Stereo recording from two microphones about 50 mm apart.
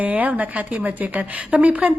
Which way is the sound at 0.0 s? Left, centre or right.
Right.